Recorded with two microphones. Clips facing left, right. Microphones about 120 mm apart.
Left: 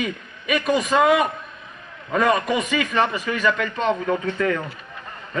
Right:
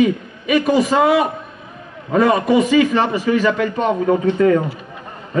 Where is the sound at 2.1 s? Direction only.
30° right (ahead or behind).